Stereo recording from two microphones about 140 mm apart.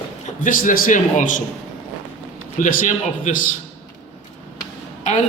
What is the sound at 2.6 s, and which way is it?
Speech, 70° left (ahead or behind).